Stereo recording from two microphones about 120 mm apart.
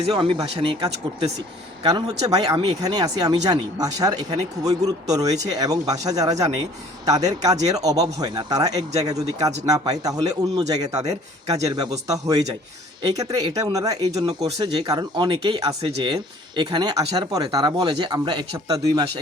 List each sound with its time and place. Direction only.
0.1 s speech: 40° right (ahead or behind)
1.8 s speech: 35° right (ahead or behind)
14.6 s speech: 40° right (ahead or behind)